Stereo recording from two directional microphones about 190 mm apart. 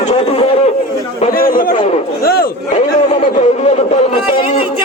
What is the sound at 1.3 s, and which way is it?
A man's voice, 50° left (ahead or behind).